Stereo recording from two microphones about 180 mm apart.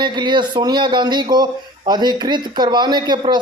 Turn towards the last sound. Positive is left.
turn(degrees=-25)  # may be behind; listen again after turning